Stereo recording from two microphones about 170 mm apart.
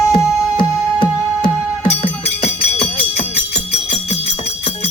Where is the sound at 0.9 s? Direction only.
30° left (ahead or behind).